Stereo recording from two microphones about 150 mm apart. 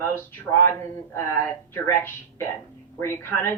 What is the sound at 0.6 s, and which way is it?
Speech, 15° left (ahead or behind).